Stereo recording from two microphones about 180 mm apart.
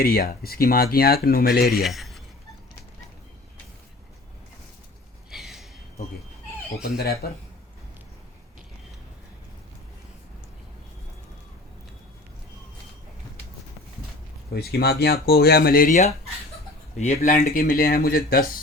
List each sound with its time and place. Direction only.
0.0 s speech: 55° left (ahead or behind)
1.7 s a man's voice: centre (ahead or behind)
5.3 s gasp: centre (ahead or behind)
6.8 s speech: 60° left (ahead or behind)
14.5 s speech: 60° left (ahead or behind)
17.0 s speech: 40° left (ahead or behind)